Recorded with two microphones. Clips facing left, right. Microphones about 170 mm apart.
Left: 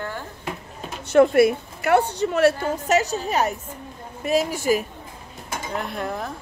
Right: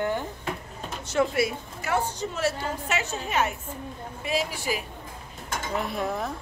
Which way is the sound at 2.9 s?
40° left (ahead or behind).